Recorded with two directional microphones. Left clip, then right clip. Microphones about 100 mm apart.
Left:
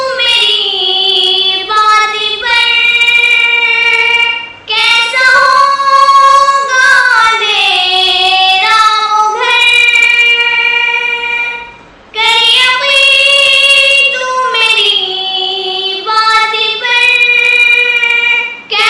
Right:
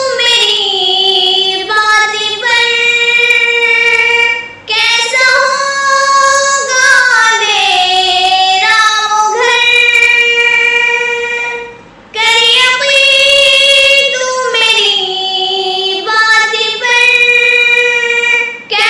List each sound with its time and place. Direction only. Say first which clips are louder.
0.3 s child singing: left 1 dB; 45° right (ahead or behind)
2.5 s child singing: left 1 dB; 45° right (ahead or behind)
4.8 s child singing: left 1 dB; 50° right (ahead or behind); by 10.8 s 35° right (ahead or behind)
12.2 s child singing: even; 40° right (ahead or behind)
16.1 s child singing: even; 40° right (ahead or behind)
16.9 s a sound: right 1 dB; 35° right (ahead or behind)